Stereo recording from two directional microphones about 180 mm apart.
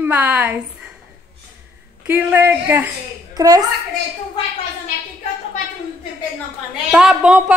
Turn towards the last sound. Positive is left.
turn(degrees=-5)  # may be behind; listen again after turning